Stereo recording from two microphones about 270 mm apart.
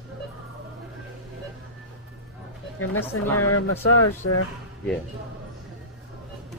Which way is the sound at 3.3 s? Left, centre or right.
Left.